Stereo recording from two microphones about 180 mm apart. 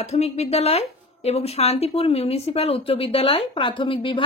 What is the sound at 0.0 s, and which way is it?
A woman's voice, 35° left (ahead or behind).